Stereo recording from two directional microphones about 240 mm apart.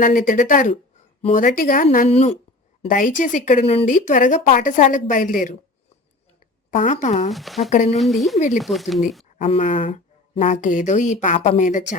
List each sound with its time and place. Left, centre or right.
0.0 s speech: left
6.7 s speech: left
7.3 s speech: centre
7.7 s speech: left
7.9 s speech: centre
9.4 s speech: left